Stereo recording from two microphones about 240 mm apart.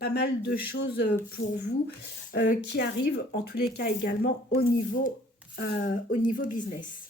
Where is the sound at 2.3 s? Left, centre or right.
Left.